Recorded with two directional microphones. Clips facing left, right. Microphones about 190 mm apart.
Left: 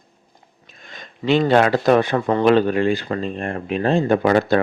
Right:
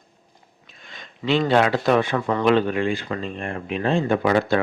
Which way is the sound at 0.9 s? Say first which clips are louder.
Left 4 dB; 45° left (ahead or behind).